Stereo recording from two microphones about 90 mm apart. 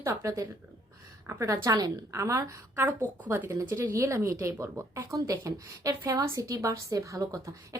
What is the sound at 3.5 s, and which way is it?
Speech, 35° right (ahead or behind).